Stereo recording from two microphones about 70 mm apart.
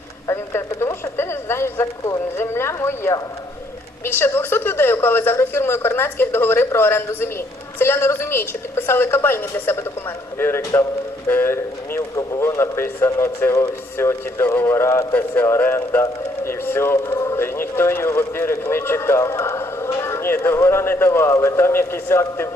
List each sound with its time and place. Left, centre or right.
0.3 s a sound: left
1.1 s speech: left
17.4 s speech: left